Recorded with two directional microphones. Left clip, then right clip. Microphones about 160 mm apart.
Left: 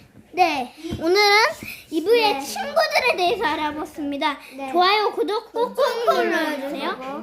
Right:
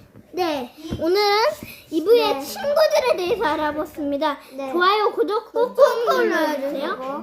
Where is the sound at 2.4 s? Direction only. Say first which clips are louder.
Right 3 dB; 5° left (ahead or behind).